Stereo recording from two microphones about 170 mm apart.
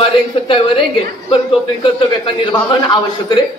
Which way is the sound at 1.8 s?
30° left (ahead or behind).